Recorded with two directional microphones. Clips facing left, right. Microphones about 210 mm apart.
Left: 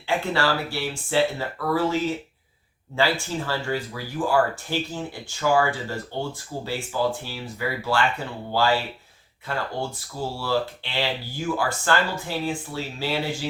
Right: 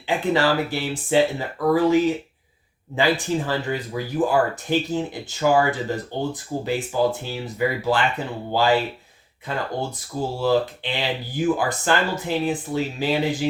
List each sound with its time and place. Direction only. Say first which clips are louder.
0.3 s speech: right 4 dB; 20° right (ahead or behind)